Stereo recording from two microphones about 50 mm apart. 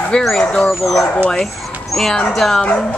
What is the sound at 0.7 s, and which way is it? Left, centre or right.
Speech, centre.